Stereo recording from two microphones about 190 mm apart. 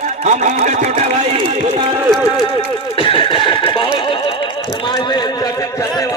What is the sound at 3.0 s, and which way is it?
Neigh, 25° left (ahead or behind).